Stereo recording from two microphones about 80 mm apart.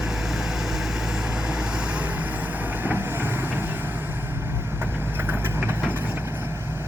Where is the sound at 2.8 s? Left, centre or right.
Right.